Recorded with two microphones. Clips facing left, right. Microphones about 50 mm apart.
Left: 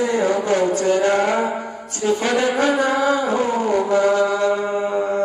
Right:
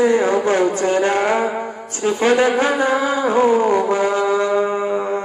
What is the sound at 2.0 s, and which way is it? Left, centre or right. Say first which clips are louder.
Speech: right 3 dB; right.